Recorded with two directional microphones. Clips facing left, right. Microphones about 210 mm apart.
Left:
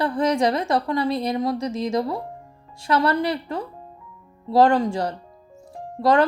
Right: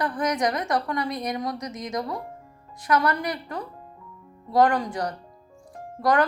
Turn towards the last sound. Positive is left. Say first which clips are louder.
# left 4 dB
turn(degrees=25)  # may be behind; listen again after turning